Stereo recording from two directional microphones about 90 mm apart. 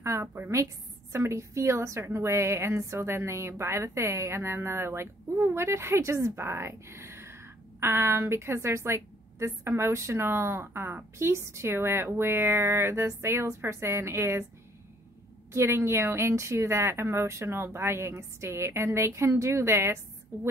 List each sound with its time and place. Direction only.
0.0 s a woman's voice: 35° right (ahead or behind)
15.5 s a woman's voice: 30° right (ahead or behind)